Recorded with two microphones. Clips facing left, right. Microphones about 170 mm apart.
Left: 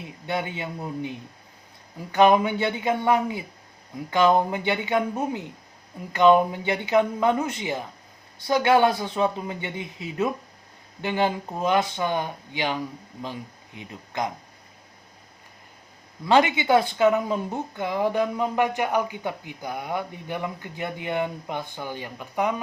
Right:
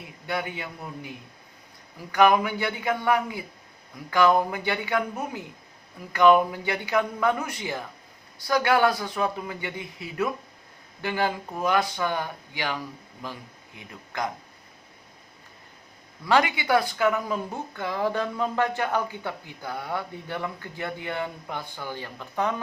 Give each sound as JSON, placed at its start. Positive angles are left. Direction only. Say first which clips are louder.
{"t": 0.3, "sound": "speech", "louder": "left 2 dB", "side_deg": 25}
{"t": 2.1, "sound": "speech", "louder": "left 2 dB", "side_deg": 25}
{"t": 16.2, "sound": "speech", "louder": "left 3 dB", "side_deg": 20}